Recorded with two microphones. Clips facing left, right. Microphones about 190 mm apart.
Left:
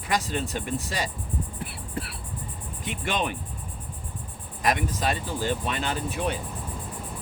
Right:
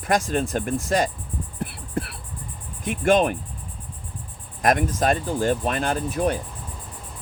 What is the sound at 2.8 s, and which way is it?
Speech, 45° right (ahead or behind).